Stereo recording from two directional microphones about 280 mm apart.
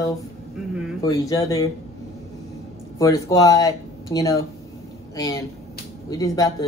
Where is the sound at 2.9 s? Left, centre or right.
Centre.